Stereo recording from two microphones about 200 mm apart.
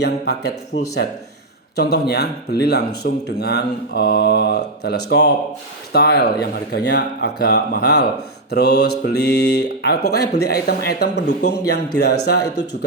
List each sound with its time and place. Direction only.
0.0 s speech: 55° left (ahead or behind)
1.7 s speech: 55° left (ahead or behind)